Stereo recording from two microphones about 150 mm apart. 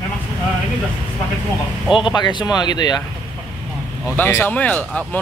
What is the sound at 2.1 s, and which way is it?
Speech, 30° left (ahead or behind).